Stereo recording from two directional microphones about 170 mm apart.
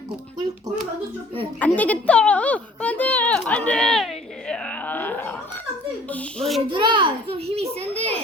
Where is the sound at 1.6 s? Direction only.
10° left (ahead or behind).